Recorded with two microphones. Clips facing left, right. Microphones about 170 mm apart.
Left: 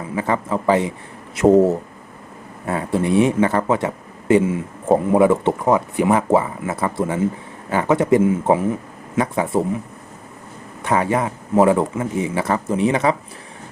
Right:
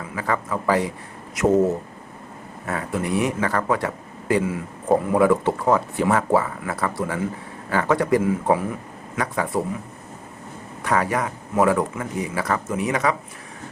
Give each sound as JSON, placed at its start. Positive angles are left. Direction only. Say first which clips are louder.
{"t": 0.1, "sound": "speech", "louder": "left 4 dB", "side_deg": 25}
{"t": 2.6, "sound": "speech", "louder": "left 5 dB", "side_deg": 25}
{"t": 10.8, "sound": "speech", "louder": "left 3 dB", "side_deg": 25}